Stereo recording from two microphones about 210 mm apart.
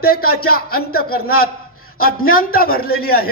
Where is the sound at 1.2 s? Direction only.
90° left.